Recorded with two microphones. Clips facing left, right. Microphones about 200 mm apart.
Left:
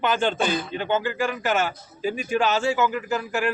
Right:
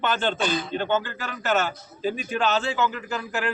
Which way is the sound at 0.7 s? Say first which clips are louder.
Even; 10° left (ahead or behind).